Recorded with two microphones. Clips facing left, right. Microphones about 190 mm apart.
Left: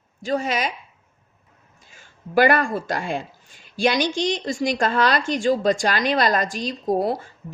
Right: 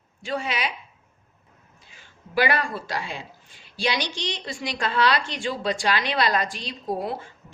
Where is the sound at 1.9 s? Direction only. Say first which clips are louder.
Left 7 dB; 45° left (ahead or behind).